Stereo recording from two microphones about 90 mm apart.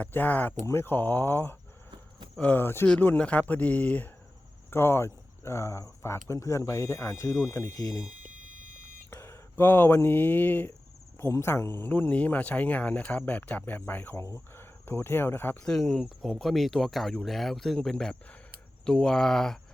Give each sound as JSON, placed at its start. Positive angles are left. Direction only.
{"t": 0.0, "sound": "speech", "side_deg": 20}
{"t": 4.7, "sound": "speech", "side_deg": 30}
{"t": 9.2, "sound": "speech", "side_deg": 25}
{"t": 15.6, "sound": "speech", "side_deg": 5}